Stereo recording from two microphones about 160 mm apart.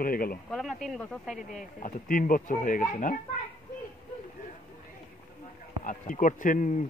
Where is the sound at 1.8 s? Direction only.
60° left (ahead or behind).